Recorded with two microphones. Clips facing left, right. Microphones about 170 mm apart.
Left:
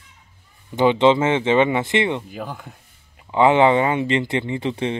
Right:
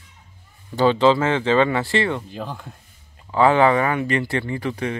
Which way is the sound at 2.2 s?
10° left (ahead or behind).